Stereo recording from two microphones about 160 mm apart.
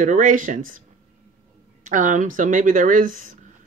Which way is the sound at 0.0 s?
50° right (ahead or behind).